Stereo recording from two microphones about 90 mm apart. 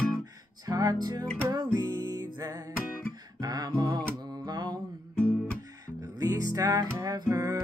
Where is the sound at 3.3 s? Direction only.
45° right (ahead or behind).